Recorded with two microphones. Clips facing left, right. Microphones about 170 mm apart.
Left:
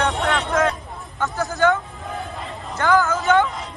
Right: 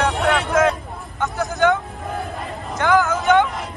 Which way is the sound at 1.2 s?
15° right (ahead or behind).